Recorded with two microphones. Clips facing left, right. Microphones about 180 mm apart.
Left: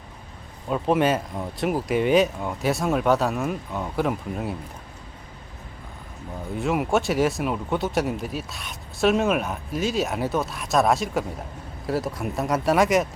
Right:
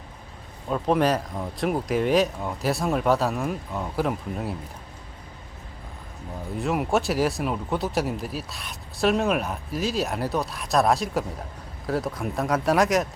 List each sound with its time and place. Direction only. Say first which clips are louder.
0.7 s speech: left 1 dB; centre (ahead or behind)
6.6 s speech: left 1 dB; centre (ahead or behind)